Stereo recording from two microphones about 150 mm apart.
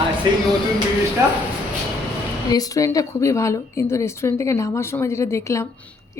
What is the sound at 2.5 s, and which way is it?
A woman's voice, 25° left (ahead or behind).